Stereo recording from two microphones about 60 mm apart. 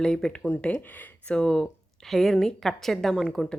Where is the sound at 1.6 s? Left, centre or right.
Centre.